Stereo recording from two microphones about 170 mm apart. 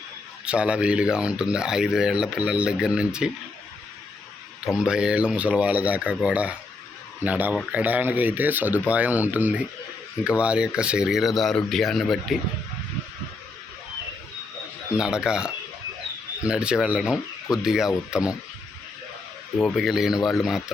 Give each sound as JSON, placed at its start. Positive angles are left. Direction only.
{"t": 0.4, "sound": "speech", "side_deg": -5}
{"t": 4.8, "sound": "speech", "side_deg": -5}
{"t": 14.9, "sound": "speech", "side_deg": -5}
{"t": 19.6, "sound": "speech", "side_deg": 0}